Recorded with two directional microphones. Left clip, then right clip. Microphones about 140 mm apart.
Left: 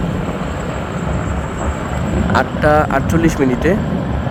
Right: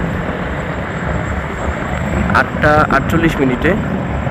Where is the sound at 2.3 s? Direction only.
20° left (ahead or behind).